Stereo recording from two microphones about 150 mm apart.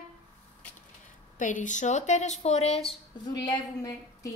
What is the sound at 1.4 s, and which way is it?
Speech, 55° left (ahead or behind).